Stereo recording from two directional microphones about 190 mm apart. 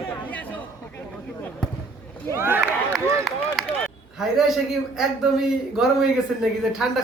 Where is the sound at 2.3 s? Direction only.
10° right (ahead or behind).